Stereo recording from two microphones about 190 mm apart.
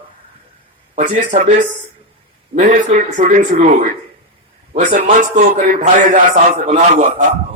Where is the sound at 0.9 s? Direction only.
40° right (ahead or behind).